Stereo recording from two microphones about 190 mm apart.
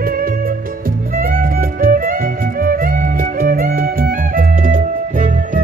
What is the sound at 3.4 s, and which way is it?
Music, 50° right (ahead or behind).